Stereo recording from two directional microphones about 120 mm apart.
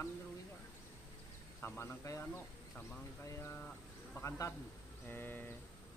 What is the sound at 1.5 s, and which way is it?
Speech, 20° left (ahead or behind).